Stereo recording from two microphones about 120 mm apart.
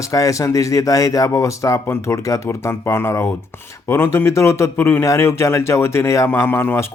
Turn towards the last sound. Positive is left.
turn(degrees=20)  # may be behind; listen again after turning